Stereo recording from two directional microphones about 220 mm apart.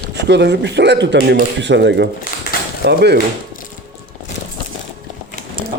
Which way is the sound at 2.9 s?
50° right (ahead or behind).